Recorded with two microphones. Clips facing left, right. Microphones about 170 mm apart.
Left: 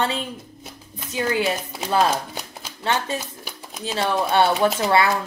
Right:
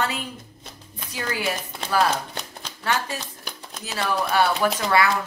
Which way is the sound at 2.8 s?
25° left (ahead or behind).